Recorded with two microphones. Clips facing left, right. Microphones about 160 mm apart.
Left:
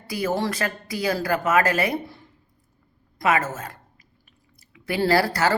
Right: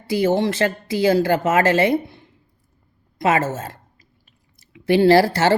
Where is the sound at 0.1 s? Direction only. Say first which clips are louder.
Right 6 dB; 25° right (ahead or behind).